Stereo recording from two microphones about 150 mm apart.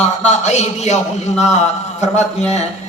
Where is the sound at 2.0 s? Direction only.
50° left (ahead or behind).